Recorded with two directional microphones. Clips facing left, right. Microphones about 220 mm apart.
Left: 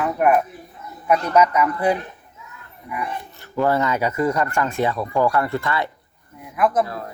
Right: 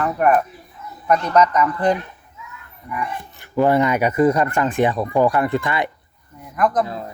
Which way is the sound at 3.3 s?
15° right (ahead or behind).